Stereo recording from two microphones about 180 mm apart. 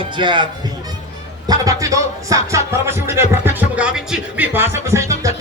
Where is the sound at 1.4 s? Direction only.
20° right (ahead or behind).